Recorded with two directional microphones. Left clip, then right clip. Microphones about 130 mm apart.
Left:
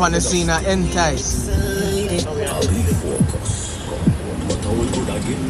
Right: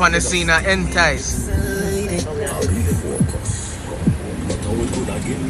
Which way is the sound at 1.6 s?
10° left (ahead or behind).